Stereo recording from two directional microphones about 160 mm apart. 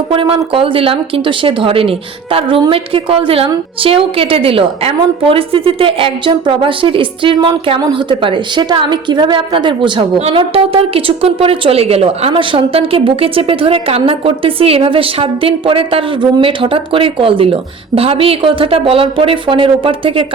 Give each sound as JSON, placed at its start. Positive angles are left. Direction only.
{"t": 0.1, "sound": "a woman's voice", "side_deg": -35}